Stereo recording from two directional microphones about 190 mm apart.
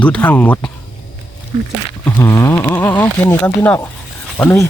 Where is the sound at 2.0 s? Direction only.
15° left (ahead or behind).